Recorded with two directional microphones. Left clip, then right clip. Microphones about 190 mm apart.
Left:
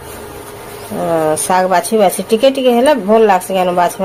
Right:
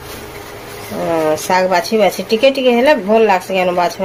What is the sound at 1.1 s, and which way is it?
A woman's voice, 15° left (ahead or behind).